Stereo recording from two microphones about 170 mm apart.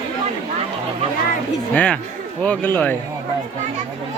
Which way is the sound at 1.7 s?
5° left (ahead or behind).